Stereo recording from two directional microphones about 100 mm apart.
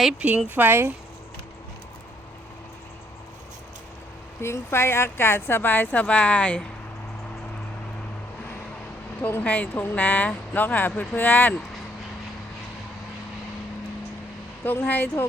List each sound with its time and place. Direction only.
0.2 s speech: 15° right (ahead or behind)
4.4 s speech: 25° left (ahead or behind)
9.2 s speech: 15° left (ahead or behind)
14.6 s speech: 20° left (ahead or behind)